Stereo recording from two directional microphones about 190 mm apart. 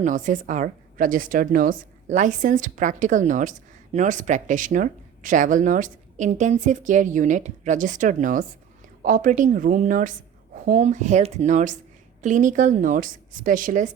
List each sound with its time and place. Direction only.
0.0 s a woman's voice: 40° right (ahead or behind)